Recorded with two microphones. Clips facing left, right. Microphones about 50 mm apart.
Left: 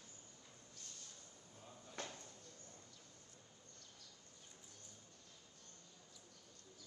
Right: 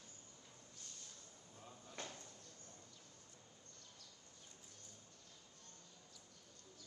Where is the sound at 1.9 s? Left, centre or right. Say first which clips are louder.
Left 2 dB; left.